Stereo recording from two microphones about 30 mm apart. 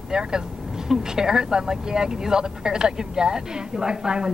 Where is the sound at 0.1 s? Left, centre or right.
Right.